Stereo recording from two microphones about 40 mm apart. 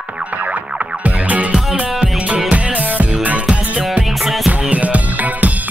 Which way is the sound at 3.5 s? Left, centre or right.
Right.